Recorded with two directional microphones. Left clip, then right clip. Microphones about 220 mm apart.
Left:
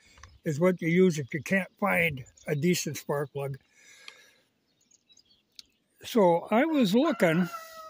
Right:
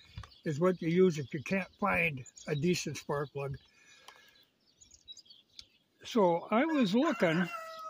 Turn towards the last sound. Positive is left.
turn(degrees=40)  # may be behind; listen again after turning